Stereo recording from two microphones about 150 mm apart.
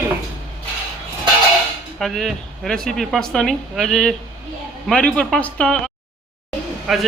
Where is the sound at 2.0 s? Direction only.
Centre (ahead or behind).